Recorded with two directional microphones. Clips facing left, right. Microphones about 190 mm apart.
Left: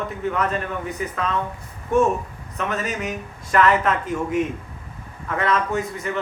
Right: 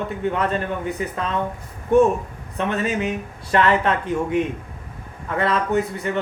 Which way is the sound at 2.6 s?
30° right (ahead or behind).